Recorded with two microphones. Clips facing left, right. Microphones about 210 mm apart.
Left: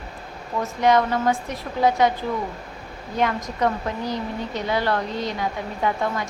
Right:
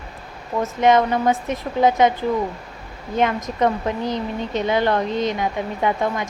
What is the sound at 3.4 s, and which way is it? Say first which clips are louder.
A woman's voice: right 3 dB; 20° right (ahead or behind).